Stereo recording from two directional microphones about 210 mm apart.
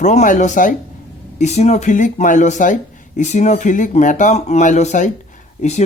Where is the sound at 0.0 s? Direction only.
35° left (ahead or behind).